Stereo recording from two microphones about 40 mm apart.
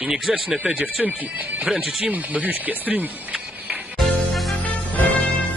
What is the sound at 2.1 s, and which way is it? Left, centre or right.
Speech, right.